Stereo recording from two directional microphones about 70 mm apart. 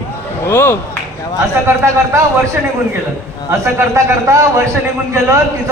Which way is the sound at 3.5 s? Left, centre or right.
Right.